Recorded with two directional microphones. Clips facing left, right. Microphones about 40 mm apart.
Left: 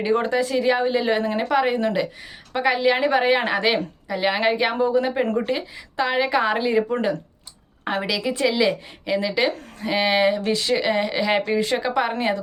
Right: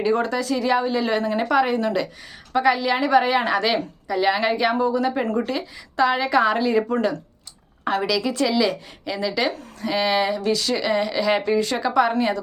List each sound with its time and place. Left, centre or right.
0.0 s speech: left
1.4 s speech: centre
6.9 s speech: left